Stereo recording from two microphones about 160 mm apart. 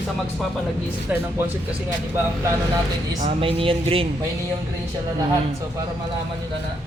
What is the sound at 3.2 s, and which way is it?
Speech, 40° right (ahead or behind).